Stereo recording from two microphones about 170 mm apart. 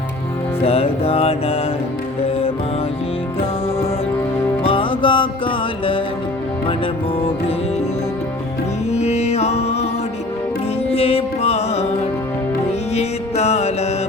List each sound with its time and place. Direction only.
0.6 s music: 35° left (ahead or behind)
4.6 s music: 30° left (ahead or behind)
8.9 s music: 40° left (ahead or behind)
10.9 s music: 35° left (ahead or behind)
12.9 s music: 40° left (ahead or behind)